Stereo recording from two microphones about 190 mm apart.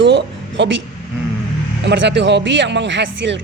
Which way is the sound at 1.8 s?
70° right (ahead or behind).